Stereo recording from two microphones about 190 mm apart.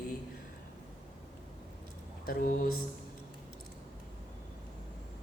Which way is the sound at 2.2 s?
45° left (ahead or behind).